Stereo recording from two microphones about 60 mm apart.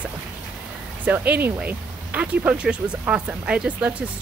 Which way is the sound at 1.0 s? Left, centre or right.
Right.